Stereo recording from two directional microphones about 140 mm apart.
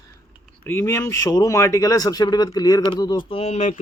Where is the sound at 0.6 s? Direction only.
15° left (ahead or behind).